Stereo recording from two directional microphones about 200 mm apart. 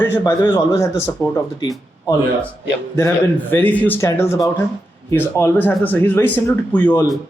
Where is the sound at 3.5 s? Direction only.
10° left (ahead or behind).